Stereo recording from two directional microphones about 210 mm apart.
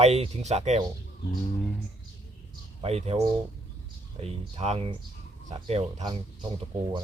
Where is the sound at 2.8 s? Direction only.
30° right (ahead or behind).